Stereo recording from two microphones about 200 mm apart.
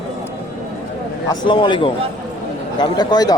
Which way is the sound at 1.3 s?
25° left (ahead or behind).